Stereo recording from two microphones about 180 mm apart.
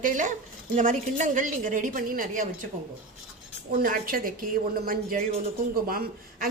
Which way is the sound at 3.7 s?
50° right (ahead or behind).